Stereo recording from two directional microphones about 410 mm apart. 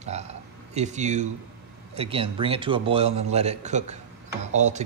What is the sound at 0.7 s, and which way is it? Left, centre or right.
Speech, centre.